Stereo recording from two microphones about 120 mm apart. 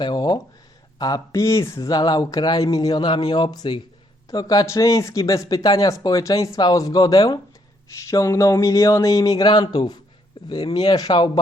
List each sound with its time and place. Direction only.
0.0 s speech: 35° left (ahead or behind)